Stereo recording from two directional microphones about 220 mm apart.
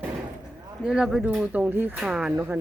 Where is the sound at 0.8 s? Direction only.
5° right (ahead or behind).